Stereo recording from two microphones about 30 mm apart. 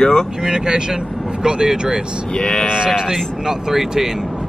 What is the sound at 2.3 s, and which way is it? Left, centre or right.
Speech, left.